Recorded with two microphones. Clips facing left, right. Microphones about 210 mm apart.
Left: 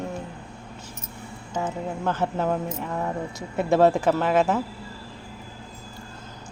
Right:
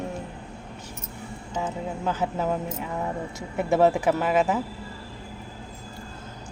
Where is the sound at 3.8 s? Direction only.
15° right (ahead or behind).